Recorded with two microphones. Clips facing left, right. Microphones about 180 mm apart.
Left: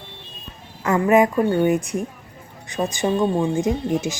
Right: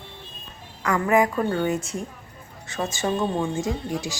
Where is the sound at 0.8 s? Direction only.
20° left (ahead or behind).